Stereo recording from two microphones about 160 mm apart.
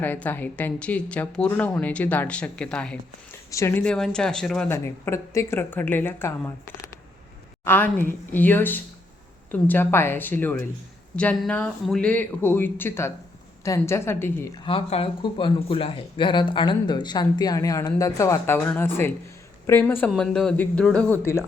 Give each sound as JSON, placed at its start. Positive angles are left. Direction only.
{"t": 0.0, "sound": "a man's voice", "side_deg": 10}
{"t": 3.5, "sound": "a man's voice", "side_deg": 20}
{"t": 3.8, "sound": "speech", "side_deg": 5}
{"t": 4.7, "sound": "a man's voice", "side_deg": 15}
{"t": 7.6, "sound": "a man's voice", "side_deg": 10}
{"t": 14.6, "sound": "a man's voice", "side_deg": 35}
{"t": 20.1, "sound": "speech", "side_deg": 5}